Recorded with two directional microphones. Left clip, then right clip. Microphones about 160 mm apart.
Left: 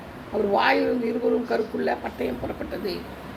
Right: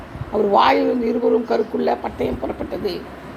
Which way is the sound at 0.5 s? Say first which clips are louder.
Right 6 dB; 35° right (ahead or behind).